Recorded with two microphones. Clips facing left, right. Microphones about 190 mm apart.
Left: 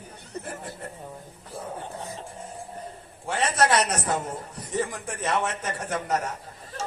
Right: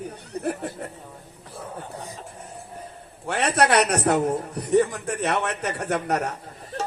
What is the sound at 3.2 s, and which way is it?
A man's voice, 65° right (ahead or behind).